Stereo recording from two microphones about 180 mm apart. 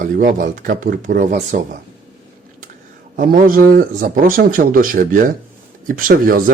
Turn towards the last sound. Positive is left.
turn(degrees=-50)  # may be behind; listen again after turning